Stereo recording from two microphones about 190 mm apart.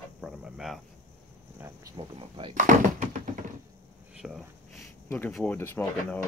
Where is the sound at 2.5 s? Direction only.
40° right (ahead or behind).